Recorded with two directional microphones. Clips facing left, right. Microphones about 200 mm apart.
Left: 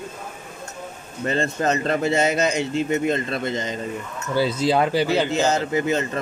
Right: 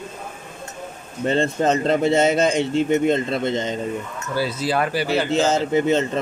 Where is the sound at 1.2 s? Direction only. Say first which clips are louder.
Right 3 dB; 30° right (ahead or behind).